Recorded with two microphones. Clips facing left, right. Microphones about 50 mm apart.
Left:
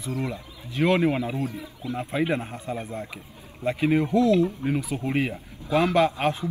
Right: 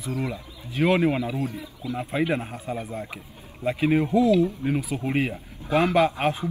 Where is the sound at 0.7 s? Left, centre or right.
Centre.